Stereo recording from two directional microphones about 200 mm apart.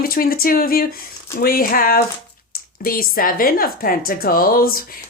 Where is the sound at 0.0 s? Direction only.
45° left (ahead or behind).